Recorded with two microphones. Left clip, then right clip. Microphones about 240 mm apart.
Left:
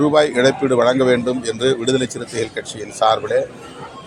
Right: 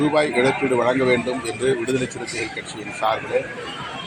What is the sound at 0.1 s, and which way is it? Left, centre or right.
A man's voice, left.